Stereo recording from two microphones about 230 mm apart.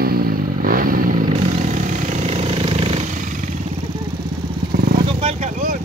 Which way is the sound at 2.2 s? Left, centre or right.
Right.